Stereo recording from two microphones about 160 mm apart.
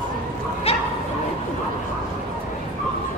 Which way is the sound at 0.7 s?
40° left (ahead or behind).